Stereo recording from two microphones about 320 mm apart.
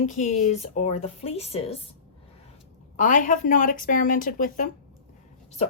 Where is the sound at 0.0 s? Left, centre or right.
Left.